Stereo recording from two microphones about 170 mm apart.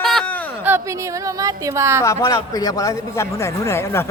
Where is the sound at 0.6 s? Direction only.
15° right (ahead or behind).